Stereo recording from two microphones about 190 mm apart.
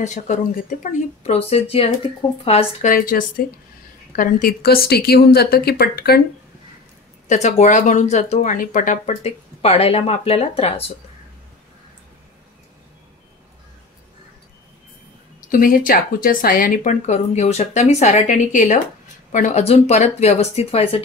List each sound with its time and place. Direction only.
0.0 s speech: 40° left (ahead or behind)
2.9 s a woman's voice: 45° left (ahead or behind)
7.2 s speech: 35° left (ahead or behind)
15.5 s speech: 45° left (ahead or behind)